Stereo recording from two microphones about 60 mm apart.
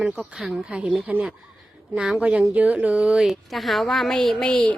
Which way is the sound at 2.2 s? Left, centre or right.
Right.